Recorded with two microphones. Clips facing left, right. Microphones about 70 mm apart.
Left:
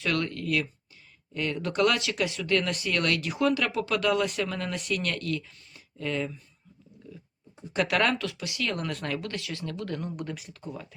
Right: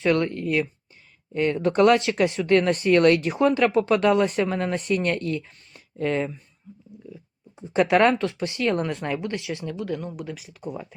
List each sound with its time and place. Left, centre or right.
0.0 s speech: right
5.4 s speech: right
7.6 s speech: right; by 10.6 s centre
10.6 s speech: centre